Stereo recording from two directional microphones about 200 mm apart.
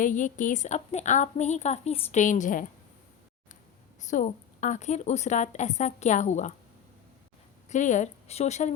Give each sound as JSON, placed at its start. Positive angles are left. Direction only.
{"t": 0.0, "sound": "a woman's voice", "side_deg": 40}
{"t": 4.0, "sound": "a woman's voice", "side_deg": 40}
{"t": 7.7, "sound": "a woman's voice", "side_deg": 35}